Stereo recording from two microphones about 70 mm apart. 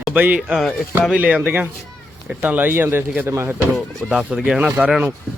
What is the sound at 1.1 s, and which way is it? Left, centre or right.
Speech, centre.